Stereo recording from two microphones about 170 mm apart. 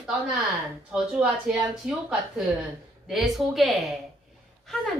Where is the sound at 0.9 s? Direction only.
5° right (ahead or behind).